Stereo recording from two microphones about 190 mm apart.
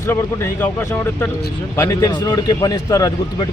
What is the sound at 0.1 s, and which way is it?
Speech, 10° left (ahead or behind).